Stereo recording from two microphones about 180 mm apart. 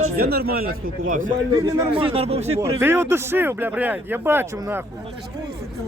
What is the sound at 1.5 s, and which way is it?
Speech, 20° right (ahead or behind).